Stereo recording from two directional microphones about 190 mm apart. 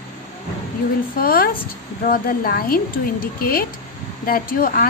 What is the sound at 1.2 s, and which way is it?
A woman's voice, 50° left (ahead or behind).